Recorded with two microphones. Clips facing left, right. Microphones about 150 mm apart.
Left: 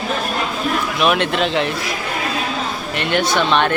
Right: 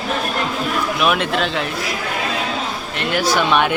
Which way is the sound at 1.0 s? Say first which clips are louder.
Left 2 dB; centre (ahead or behind).